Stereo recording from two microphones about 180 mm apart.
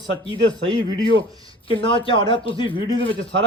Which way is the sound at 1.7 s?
30° left (ahead or behind).